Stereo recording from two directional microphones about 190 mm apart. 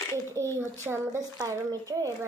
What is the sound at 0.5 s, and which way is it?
Speech, 15° right (ahead or behind).